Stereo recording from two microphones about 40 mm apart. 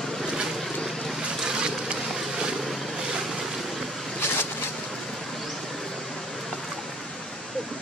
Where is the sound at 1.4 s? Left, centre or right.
Centre.